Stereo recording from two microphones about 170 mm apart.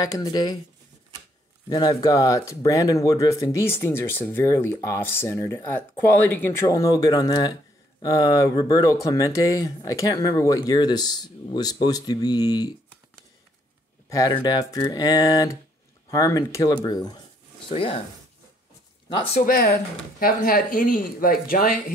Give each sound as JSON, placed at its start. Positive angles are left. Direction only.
{"t": 0.0, "sound": "speech", "side_deg": 20}
{"t": 1.7, "sound": "speech", "side_deg": 25}
{"t": 14.0, "sound": "speech", "side_deg": 20}
{"t": 19.4, "sound": "speech", "side_deg": 60}